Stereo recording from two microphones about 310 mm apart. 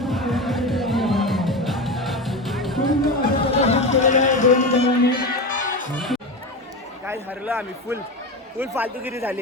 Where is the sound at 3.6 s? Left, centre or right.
Left.